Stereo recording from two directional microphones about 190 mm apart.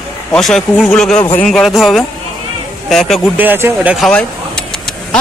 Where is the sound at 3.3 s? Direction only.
10° right (ahead or behind).